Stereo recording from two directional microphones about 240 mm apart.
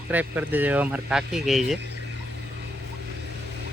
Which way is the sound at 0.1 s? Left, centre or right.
Centre.